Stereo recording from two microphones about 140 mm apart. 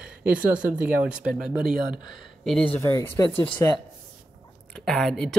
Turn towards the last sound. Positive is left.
turn(degrees=5)  # may be behind; listen again after turning